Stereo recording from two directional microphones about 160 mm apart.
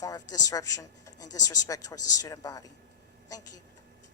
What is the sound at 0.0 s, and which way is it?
A woman's voice, 20° left (ahead or behind).